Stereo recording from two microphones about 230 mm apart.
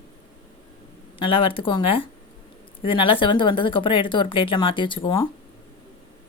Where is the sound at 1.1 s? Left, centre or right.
Left.